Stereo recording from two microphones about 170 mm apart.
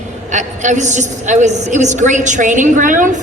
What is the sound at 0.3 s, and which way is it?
A woman's voice, 45° right (ahead or behind).